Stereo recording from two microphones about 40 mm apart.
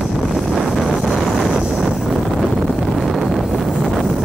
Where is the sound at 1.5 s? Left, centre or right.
Centre.